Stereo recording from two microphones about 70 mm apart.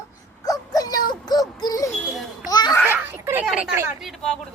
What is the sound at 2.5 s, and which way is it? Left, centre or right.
Babbling, left.